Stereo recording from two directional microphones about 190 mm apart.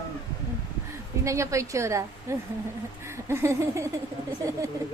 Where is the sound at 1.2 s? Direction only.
15° right (ahead or behind).